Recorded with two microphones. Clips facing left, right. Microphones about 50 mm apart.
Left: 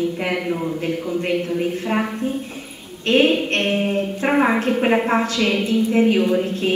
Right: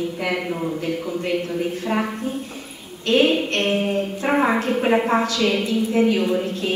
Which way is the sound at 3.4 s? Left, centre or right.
Left.